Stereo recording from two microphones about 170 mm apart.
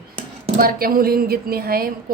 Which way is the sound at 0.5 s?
60° right (ahead or behind).